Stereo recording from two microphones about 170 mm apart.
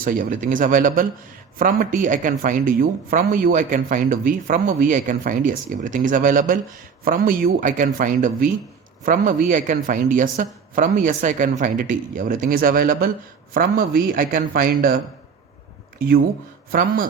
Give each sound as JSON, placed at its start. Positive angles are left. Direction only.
{"t": 0.0, "sound": "a man's voice", "side_deg": -50}
{"t": 16.7, "sound": "a man's voice", "side_deg": -55}